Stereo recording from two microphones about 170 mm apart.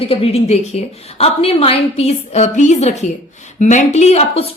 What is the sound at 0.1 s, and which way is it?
Speech, 35° left (ahead or behind).